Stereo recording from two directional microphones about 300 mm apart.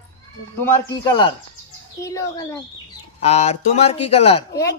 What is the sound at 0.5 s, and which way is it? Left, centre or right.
Speech, centre.